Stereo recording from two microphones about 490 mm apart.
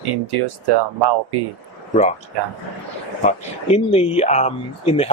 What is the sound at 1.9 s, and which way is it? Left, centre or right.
Speech, centre.